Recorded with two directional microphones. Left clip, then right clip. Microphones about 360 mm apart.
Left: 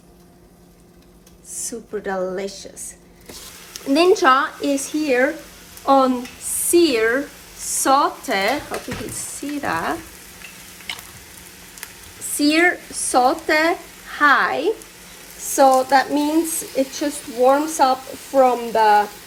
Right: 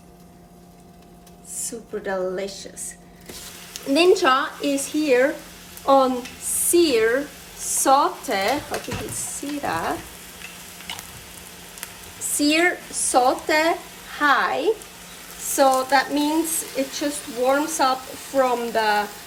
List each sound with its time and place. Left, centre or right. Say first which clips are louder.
1.5 s speech: left 3 dB; centre
3.7 s speech: left 1 dB; centre
9.6 s speech: left 2 dB; left
12.4 s speech: left 3 dB; centre